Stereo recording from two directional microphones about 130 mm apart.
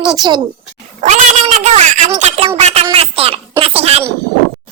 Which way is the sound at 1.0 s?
65° right (ahead or behind).